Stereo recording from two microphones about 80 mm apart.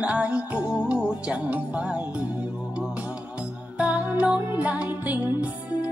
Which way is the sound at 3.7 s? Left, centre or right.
Centre.